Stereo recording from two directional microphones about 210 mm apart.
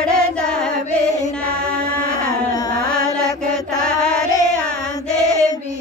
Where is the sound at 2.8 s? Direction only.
5° left (ahead or behind).